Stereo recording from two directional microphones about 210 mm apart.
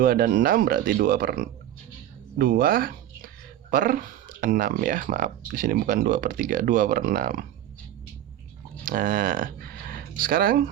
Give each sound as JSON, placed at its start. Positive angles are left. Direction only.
{"t": 0.0, "sound": "speech", "side_deg": -45}
{"t": 8.8, "sound": "speech", "side_deg": -40}